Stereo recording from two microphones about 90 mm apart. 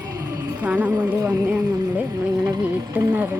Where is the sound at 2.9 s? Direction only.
20° right (ahead or behind).